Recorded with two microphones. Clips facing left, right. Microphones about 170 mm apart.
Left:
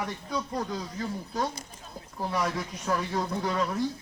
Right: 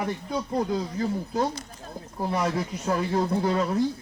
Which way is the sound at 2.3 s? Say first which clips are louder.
Right 4 dB; 30° right (ahead or behind).